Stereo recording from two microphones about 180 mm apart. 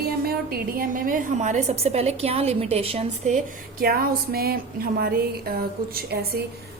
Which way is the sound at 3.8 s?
55° right (ahead or behind).